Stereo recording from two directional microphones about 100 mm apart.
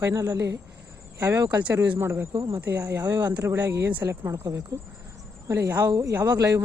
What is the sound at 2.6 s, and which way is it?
Speech, 20° right (ahead or behind).